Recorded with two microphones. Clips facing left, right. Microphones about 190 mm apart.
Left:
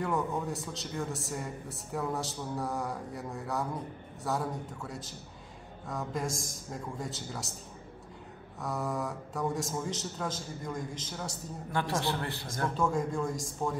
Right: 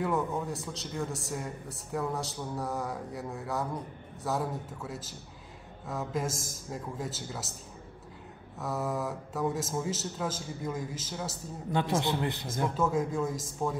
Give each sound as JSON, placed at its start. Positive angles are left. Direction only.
{"t": 0.0, "sound": "a man's voice", "side_deg": 0}
{"t": 8.5, "sound": "a man's voice", "side_deg": 0}
{"t": 11.7, "sound": "a man's voice", "side_deg": -20}
{"t": 12.7, "sound": "a man's voice", "side_deg": -5}